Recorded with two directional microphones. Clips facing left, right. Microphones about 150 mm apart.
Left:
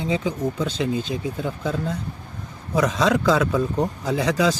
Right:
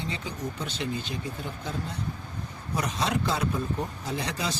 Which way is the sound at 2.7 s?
90° left.